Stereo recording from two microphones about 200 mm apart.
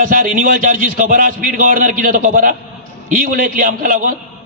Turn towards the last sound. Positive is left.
turn(degrees=-40)  # may be behind; listen again after turning